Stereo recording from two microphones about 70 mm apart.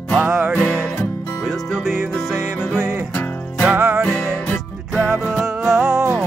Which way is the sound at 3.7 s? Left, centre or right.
Right.